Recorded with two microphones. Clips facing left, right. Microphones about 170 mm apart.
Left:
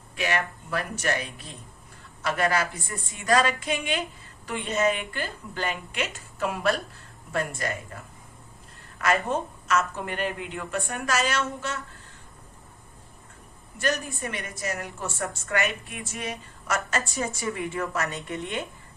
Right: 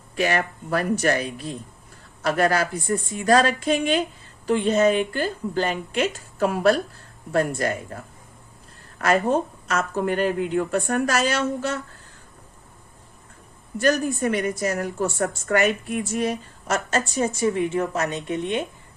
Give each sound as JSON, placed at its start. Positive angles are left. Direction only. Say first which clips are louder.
{"t": 0.2, "sound": "a woman's voice", "louder": "right 5 dB", "side_deg": -40}
{"t": 9.0, "sound": "a woman's voice", "louder": "right 5 dB", "side_deg": -35}
{"t": 13.7, "sound": "a woman's voice", "louder": "right 8 dB", "side_deg": -40}
{"t": 16.6, "sound": "a woman's voice", "louder": "right 4 dB", "side_deg": -25}